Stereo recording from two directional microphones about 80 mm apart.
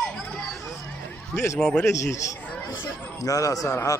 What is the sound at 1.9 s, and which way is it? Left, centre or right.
Speech, left.